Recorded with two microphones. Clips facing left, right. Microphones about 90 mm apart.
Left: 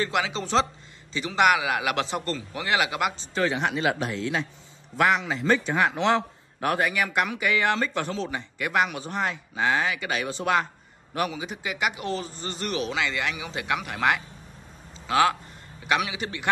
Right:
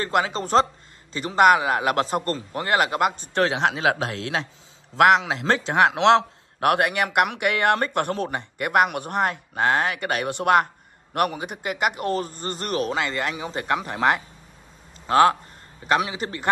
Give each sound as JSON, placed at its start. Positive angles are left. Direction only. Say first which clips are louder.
{"t": 0.0, "sound": "a man's voice", "louder": "right 3 dB", "side_deg": -45}
{"t": 3.3, "sound": "a man's voice", "louder": "right 3 dB", "side_deg": -90}
{"t": 15.0, "sound": "a man's voice", "louder": "right 5 dB", "side_deg": -40}